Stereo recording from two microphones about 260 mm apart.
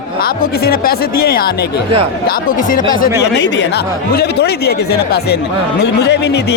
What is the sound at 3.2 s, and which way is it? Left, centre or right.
Speech, left.